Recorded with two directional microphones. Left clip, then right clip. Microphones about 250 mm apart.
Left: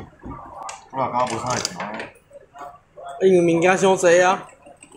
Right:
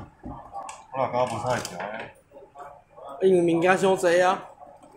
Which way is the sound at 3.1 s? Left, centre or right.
Centre.